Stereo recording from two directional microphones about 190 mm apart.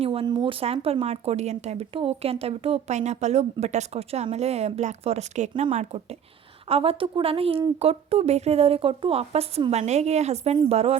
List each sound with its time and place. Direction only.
0.0 s speech: 30° right (ahead or behind)